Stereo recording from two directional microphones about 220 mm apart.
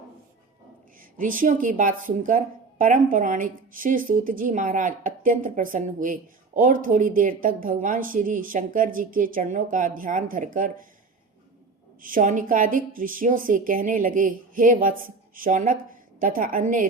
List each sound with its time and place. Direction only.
1.2 s a woman's voice: 35° right (ahead or behind)
12.0 s a woman's voice: 35° right (ahead or behind)